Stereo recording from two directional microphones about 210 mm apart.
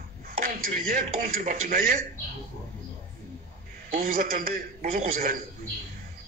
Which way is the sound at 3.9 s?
40° right (ahead or behind).